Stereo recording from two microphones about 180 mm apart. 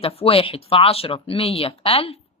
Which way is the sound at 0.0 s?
35° left (ahead or behind).